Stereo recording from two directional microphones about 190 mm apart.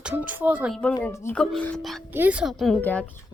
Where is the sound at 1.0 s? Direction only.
10° left (ahead or behind).